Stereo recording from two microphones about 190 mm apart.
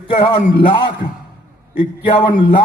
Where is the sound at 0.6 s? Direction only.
25° left (ahead or behind).